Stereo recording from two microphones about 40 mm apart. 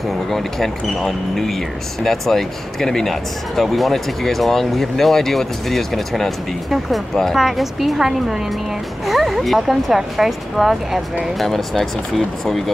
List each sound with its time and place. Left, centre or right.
0.3 s speech: centre
7.3 s speech: centre
11.3 s speech: centre